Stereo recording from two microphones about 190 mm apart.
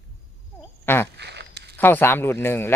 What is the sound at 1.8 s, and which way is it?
Speech, 10° left (ahead or behind).